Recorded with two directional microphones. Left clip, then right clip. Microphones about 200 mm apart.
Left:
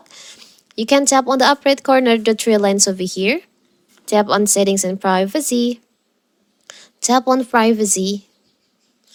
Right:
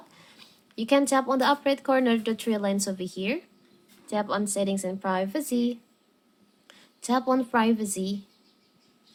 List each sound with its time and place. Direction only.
0.1 s speech: 35° left (ahead or behind)